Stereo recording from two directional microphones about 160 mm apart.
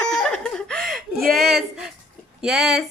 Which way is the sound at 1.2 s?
70° right (ahead or behind).